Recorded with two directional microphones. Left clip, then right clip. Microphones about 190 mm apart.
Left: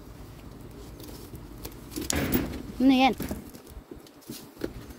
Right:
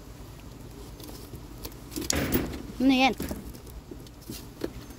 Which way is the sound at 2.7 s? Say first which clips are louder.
Left 1 dB; 15° left (ahead or behind).